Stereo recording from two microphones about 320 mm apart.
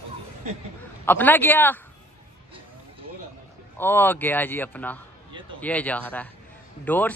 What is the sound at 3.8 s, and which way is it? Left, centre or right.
Speech, centre.